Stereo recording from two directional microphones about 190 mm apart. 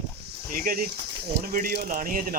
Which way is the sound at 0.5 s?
50° right (ahead or behind).